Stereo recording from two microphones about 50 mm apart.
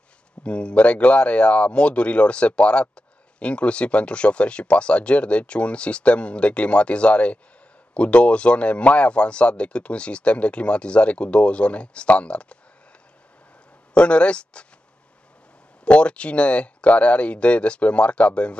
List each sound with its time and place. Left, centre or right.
0.4 s speech: left
13.9 s speech: left
15.8 s speech: left